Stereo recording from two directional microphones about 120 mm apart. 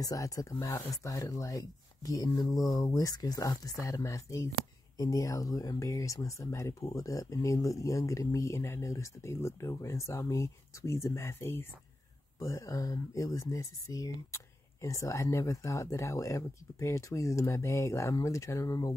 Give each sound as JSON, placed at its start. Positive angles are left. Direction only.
{"t": 0.0, "sound": "speech", "side_deg": 30}